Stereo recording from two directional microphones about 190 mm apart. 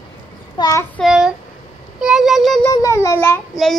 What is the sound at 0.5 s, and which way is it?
Child singing, 15° left (ahead or behind).